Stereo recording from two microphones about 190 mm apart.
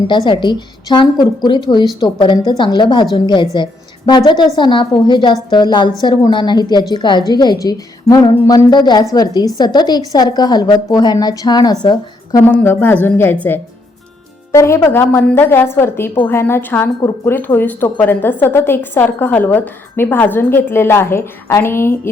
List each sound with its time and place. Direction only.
0.3 s a woman's voice: 25° left (ahead or behind)
12.4 s a woman's voice: 10° left (ahead or behind)